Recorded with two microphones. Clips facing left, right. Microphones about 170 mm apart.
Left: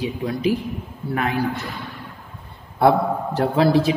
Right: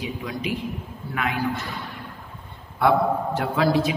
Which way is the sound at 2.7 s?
35° left (ahead or behind).